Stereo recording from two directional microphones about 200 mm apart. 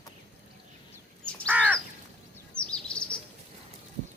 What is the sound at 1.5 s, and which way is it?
Crow, 10° right (ahead or behind).